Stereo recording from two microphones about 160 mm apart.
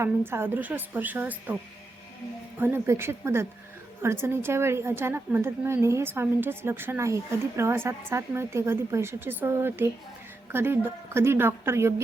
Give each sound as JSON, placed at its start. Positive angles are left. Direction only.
{"t": 0.0, "sound": "a woman's voice", "side_deg": -15}
{"t": 2.6, "sound": "a woman's voice", "side_deg": -15}